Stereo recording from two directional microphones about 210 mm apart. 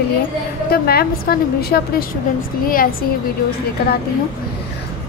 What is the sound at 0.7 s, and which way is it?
A child's voice, 45° left (ahead or behind).